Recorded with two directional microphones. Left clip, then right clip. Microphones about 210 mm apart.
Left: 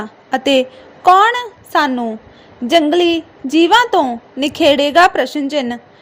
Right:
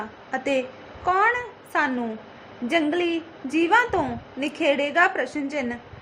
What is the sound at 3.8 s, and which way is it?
Speech, 35° left (ahead or behind).